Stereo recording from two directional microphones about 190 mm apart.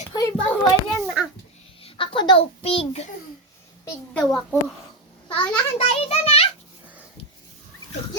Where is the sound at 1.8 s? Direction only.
25° left (ahead or behind).